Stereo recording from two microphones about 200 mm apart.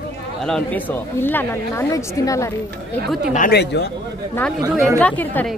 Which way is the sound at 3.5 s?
55° left (ahead or behind).